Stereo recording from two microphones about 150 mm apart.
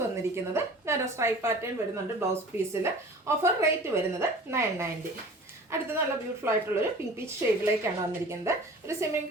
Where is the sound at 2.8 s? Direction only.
20° right (ahead or behind).